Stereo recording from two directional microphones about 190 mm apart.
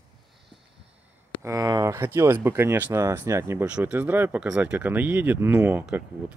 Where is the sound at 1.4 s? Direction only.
20° right (ahead or behind).